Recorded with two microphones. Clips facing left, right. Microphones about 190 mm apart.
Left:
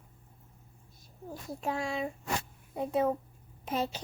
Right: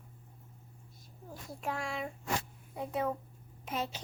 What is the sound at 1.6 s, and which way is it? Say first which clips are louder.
Child singing: left 4 dB; 20° left (ahead or behind).